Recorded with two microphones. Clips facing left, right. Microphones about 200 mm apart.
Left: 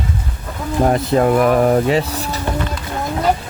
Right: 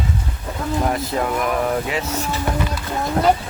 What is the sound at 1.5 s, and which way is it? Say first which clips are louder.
Speech: left 7 dB; 40° left (ahead or behind).